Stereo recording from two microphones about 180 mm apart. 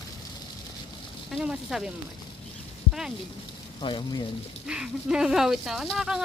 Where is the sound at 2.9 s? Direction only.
5° right (ahead or behind).